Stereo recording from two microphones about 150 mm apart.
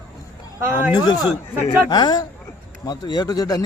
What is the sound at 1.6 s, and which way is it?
Speech, 30° left (ahead or behind).